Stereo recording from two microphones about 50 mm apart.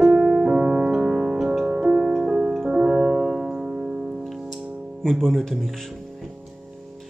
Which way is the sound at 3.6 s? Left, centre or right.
Centre.